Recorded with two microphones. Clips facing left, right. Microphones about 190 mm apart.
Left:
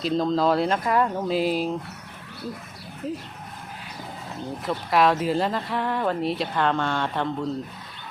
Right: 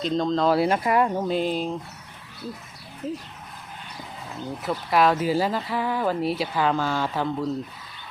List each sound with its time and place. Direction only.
0.0 s speech: 5° left (ahead or behind)
1.3 s speech: 5° left (ahead or behind)
3.0 s speech: centre (ahead or behind)
4.6 s speech: centre (ahead or behind)